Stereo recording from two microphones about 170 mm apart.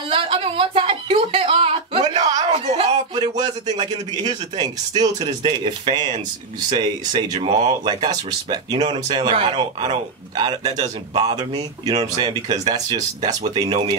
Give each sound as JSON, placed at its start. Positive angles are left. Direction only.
{"t": 0.1, "sound": "a sound", "side_deg": -30}
{"t": 2.2, "sound": "a sound", "side_deg": -25}
{"t": 3.2, "sound": "a man's voice", "side_deg": -25}
{"t": 8.1, "sound": "a man's voice", "side_deg": -20}
{"t": 8.7, "sound": "a man's voice", "side_deg": -40}
{"t": 13.3, "sound": "a man's voice", "side_deg": -40}